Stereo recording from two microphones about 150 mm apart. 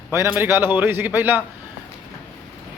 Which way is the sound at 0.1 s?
15° right (ahead or behind).